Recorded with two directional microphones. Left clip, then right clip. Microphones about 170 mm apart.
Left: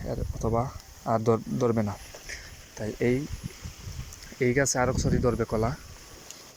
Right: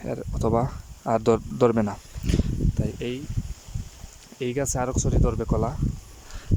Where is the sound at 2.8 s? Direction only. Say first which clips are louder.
Left 1 dB; 15° right (ahead or behind).